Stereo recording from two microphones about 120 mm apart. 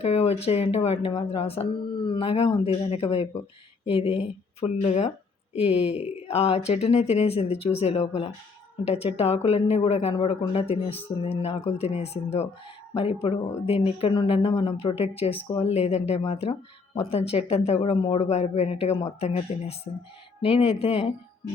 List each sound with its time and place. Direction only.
0.0 s speech: 60° left (ahead or behind)
5.5 s speech: 60° left (ahead or behind)
14.1 s speech: 45° left (ahead or behind); by 17.9 s 60° left (ahead or behind)
17.9 s speech: 50° left (ahead or behind)
19.5 s speech: 80° left
20.4 s speech: 55° left (ahead or behind)